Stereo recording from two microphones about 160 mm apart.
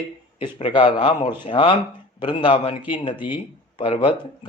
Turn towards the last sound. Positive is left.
turn(degrees=30)  # may be behind; listen again after turning